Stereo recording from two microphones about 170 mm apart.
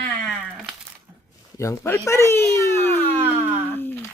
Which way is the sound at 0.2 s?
5° left (ahead or behind).